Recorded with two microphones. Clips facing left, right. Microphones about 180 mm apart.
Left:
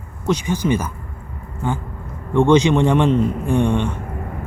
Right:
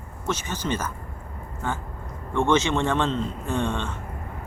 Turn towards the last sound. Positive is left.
turn(degrees=15)  # may be behind; listen again after turning